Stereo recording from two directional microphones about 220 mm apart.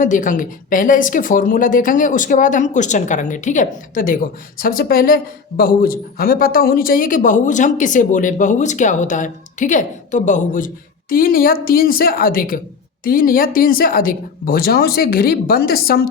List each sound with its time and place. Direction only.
0.0 s a woman's voice: 35° left (ahead or behind)